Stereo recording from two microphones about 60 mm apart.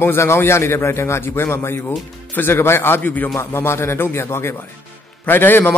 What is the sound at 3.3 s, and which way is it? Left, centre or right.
Speech, left.